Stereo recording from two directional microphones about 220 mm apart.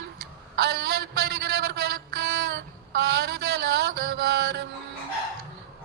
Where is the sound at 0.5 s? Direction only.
45° right (ahead or behind).